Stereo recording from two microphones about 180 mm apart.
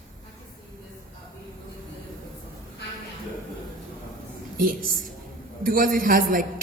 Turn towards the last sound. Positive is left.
turn(degrees=-50)  # may be behind; listen again after turning